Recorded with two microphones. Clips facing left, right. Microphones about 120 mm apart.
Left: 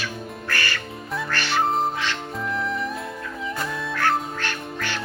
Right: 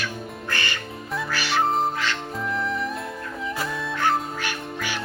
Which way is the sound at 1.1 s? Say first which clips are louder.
Even; centre (ahead or behind).